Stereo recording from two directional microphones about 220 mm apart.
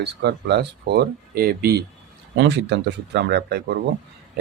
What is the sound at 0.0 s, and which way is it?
Speech, 50° right (ahead or behind).